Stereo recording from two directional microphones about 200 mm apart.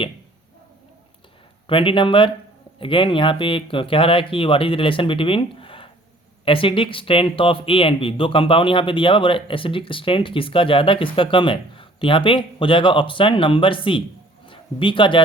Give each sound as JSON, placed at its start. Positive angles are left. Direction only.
{"t": 1.6, "sound": "speech", "side_deg": 25}
{"t": 14.4, "sound": "bow-wow", "side_deg": 25}